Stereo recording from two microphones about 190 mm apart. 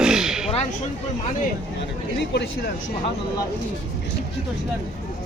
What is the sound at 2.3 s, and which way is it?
Speech, 65° left (ahead or behind).